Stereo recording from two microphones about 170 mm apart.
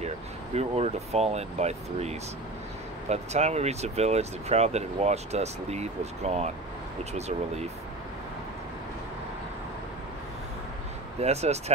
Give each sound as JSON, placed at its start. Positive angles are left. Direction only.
{"t": 0.6, "sound": "speech", "side_deg": -40}
{"t": 11.1, "sound": "speech", "side_deg": -40}